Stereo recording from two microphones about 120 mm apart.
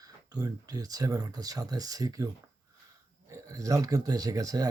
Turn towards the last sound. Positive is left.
turn(degrees=-30)  # may be behind; listen again after turning